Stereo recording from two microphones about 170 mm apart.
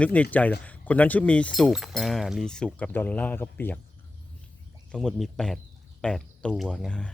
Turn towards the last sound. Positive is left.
turn(degrees=5)  # may be behind; listen again after turning